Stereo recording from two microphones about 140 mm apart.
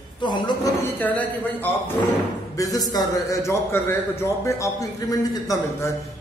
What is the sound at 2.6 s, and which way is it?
A man's voice, 25° left (ahead or behind).